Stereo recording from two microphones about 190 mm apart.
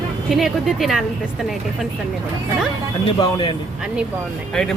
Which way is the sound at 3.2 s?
25° left (ahead or behind).